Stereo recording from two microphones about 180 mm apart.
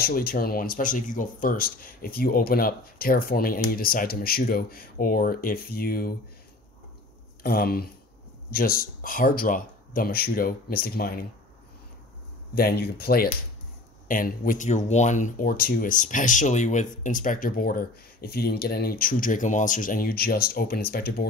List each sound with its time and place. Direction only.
0.0 s speech: 55° left (ahead or behind)
7.4 s speech: 55° left (ahead or behind)
12.5 s speech: 60° left (ahead or behind)